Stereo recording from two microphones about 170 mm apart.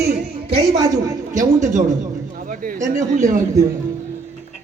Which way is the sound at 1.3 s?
50° right (ahead or behind).